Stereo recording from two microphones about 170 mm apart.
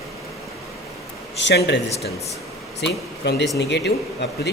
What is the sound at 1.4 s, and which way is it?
Speech, 90° left.